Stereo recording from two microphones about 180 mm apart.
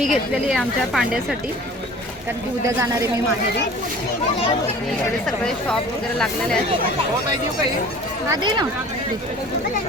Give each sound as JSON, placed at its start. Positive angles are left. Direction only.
{"t": 0.0, "sound": "a woman's voice", "side_deg": 0}
{"t": 2.6, "sound": "speech", "side_deg": -15}
{"t": 5.4, "sound": "a woman's voice", "side_deg": 5}
{"t": 8.3, "sound": "speech", "side_deg": -25}